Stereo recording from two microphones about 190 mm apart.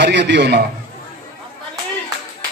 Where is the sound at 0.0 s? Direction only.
65° right (ahead or behind).